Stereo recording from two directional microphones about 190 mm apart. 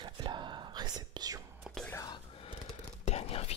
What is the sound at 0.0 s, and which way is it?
Whispering, 25° right (ahead or behind).